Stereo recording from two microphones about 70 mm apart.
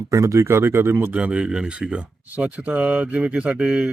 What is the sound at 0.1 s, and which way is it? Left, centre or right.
Speech, right.